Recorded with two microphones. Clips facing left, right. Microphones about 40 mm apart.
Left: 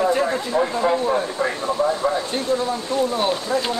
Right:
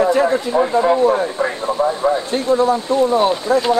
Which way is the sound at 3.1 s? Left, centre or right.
Right.